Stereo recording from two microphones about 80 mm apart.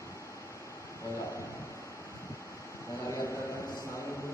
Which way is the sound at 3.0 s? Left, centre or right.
Left.